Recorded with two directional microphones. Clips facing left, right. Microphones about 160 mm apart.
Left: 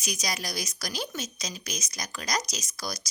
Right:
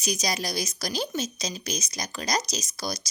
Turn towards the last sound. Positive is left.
turn(degrees=-25)  # may be behind; listen again after turning